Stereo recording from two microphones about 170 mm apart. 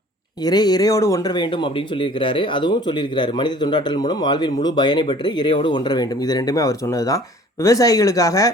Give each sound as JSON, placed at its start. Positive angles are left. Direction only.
{"t": 0.4, "sound": "speech", "side_deg": 25}